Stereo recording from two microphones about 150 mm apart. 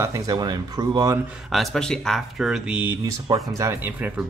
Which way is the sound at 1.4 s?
Centre (ahead or behind).